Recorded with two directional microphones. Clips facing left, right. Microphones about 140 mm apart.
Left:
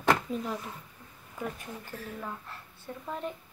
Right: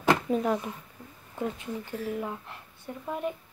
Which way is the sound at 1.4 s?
20° right (ahead or behind).